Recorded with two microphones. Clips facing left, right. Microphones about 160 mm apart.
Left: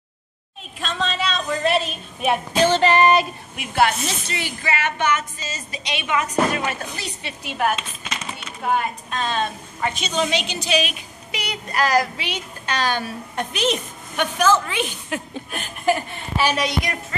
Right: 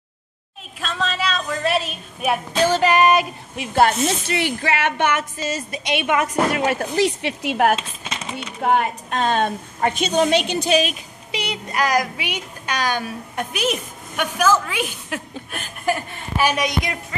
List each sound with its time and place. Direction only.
0.7 s a woman's voice: centre (ahead or behind)
3.5 s speech: 35° right (ahead or behind)
4.3 s a woman's voice: 65° right (ahead or behind)
6.7 s speech: 90° right
7.7 s a sound: 25° right (ahead or behind)
8.6 s a woman's voice: 65° right (ahead or behind); by 11.0 s 45° right (ahead or behind)
11.3 s a woman's voice: 20° right (ahead or behind); by 15.6 s centre (ahead or behind)
16.3 s a woman's voice: 15° right (ahead or behind)